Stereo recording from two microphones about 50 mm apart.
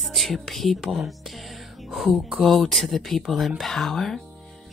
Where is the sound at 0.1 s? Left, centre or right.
Centre.